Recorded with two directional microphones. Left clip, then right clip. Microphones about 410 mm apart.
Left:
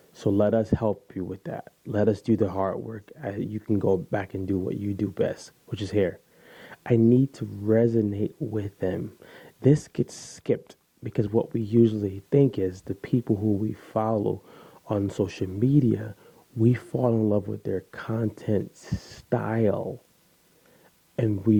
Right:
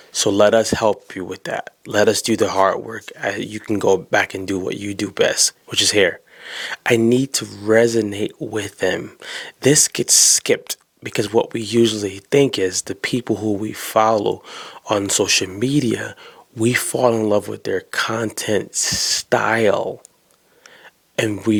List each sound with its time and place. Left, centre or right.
0.1 s speech: centre
13.3 s speech: centre
13.7 s speech: centre
21.2 s speech: centre